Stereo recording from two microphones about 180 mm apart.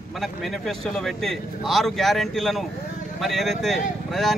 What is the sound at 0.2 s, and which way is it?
Speech, centre (ahead or behind).